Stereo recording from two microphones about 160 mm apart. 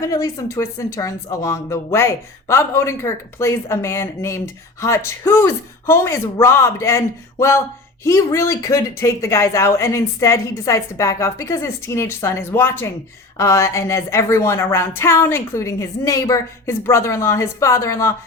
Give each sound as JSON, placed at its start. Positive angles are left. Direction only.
{"t": 0.0, "sound": "speech", "side_deg": 20}